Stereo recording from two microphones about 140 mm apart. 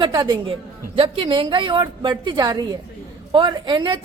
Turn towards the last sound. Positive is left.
turn(degrees=-35)  # may be behind; listen again after turning